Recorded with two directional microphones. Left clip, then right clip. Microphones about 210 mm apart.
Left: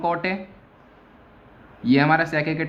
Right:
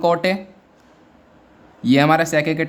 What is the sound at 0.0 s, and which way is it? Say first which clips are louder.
Speech: right 6 dB; 50° right (ahead or behind).